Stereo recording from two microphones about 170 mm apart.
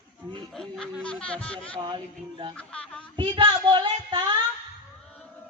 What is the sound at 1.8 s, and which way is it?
Speech, 30° right (ahead or behind).